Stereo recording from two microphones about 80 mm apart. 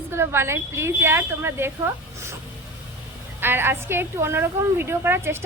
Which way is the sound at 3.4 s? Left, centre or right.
Right.